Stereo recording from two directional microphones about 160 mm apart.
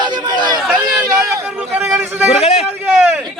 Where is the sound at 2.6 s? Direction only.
5° right (ahead or behind).